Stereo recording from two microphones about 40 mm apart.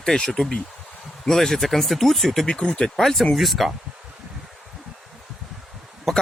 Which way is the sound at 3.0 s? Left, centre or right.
Centre.